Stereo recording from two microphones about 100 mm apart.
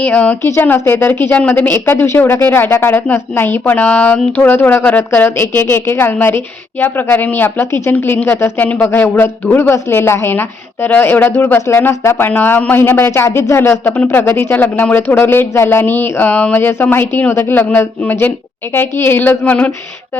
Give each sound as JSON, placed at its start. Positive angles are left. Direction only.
{"t": 0.0, "sound": "a woman's voice", "side_deg": 15}